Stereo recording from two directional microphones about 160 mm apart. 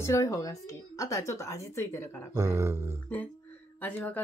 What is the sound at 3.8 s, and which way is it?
Speech, 10° left (ahead or behind).